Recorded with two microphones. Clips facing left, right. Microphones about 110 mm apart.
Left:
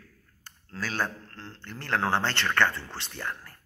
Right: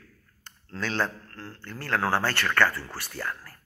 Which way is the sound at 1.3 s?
20° left (ahead or behind).